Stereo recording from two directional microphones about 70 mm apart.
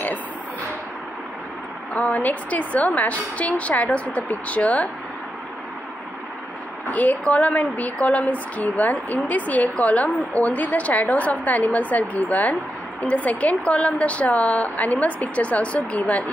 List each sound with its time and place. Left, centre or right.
2.1 s a woman's voice: left
6.9 s a woman's voice: left